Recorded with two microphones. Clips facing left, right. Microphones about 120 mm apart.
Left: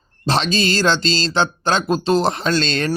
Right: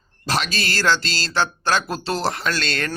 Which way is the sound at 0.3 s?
25° left (ahead or behind).